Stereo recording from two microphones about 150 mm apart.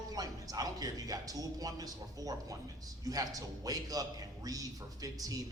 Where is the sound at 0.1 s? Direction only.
25° right (ahead or behind).